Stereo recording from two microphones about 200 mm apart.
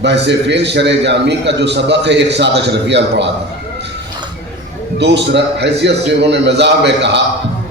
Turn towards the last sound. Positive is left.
turn(degrees=-60)  # may be behind; listen again after turning